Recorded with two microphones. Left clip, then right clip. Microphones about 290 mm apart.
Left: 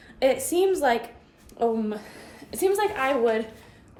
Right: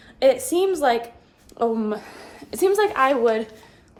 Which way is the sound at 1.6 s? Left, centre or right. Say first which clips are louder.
Right 2 dB; right.